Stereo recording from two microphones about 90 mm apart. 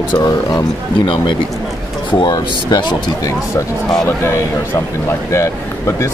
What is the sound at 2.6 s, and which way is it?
Speech, 50° left (ahead or behind).